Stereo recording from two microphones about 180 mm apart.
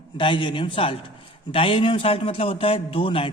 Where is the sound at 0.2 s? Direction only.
25° left (ahead or behind).